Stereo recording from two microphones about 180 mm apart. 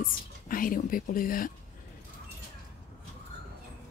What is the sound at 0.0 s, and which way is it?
Speech, 50° left (ahead or behind).